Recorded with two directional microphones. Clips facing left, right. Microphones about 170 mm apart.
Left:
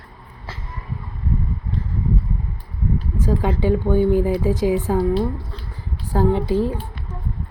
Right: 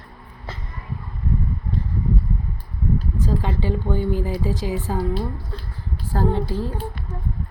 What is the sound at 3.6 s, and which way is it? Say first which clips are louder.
A woman's voice: left 6 dB; 15° left (ahead or behind).